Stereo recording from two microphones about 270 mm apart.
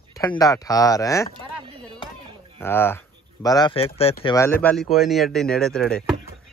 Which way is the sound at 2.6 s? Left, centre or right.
Centre.